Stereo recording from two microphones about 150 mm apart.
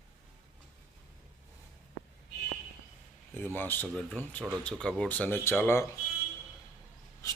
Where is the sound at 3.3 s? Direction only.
15° left (ahead or behind).